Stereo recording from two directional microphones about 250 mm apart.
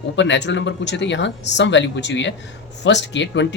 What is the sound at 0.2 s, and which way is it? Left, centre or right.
Speech, left.